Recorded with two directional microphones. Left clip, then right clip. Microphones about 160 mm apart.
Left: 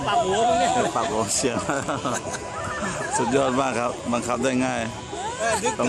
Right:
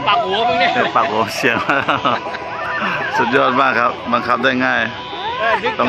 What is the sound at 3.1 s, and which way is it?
A man's voice, 20° left (ahead or behind).